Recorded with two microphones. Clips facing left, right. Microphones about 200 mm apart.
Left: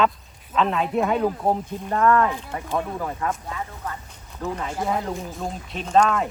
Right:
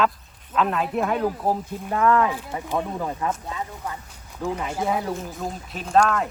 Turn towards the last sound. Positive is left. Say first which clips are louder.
# left 1 dB
turn(degrees=0)  # may be behind; listen again after turning